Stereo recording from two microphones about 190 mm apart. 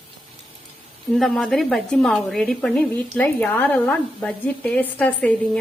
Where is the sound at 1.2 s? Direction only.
Centre (ahead or behind).